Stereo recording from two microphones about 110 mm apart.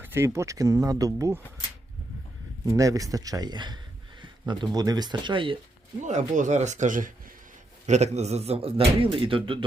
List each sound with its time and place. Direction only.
0.0 s speech: 20° right (ahead or behind)
2.6 s speech: 30° right (ahead or behind); by 5.5 s 50° right (ahead or behind)
6.0 s speech: 90° right
7.9 s speech: 90° right; by 9.6 s 50° right (ahead or behind)